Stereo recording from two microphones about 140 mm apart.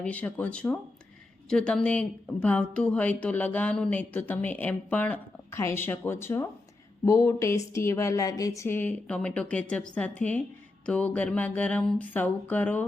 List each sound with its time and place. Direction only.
0.0 s speech: 10° left (ahead or behind)